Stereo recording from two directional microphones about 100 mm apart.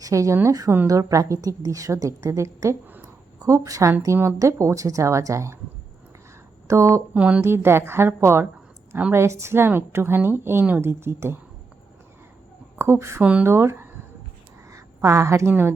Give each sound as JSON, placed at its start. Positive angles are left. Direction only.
{"t": 0.0, "sound": "a woman's voice", "side_deg": -35}
{"t": 6.7, "sound": "a woman's voice", "side_deg": -30}
{"t": 7.1, "sound": "a woman's voice", "side_deg": -15}
{"t": 7.4, "sound": "a woman's voice", "side_deg": -25}
{"t": 12.8, "sound": "a woman's voice", "side_deg": -25}
{"t": 13.2, "sound": "a woman's voice", "side_deg": -15}
{"t": 13.5, "sound": "a woman's voice", "side_deg": -25}